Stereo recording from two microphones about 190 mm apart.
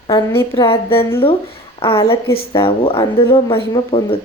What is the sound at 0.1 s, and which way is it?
A woman's voice, 20° left (ahead or behind).